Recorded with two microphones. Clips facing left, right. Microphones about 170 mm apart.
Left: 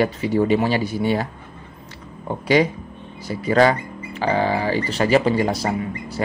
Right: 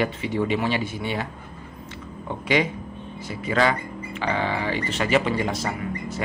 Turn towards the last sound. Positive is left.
turn(degrees=35)  # may be behind; listen again after turning